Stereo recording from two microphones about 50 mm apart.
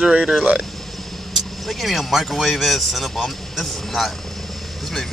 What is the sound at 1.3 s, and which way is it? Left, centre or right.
Speech, centre.